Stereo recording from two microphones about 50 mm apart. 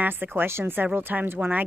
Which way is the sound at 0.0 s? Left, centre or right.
Right.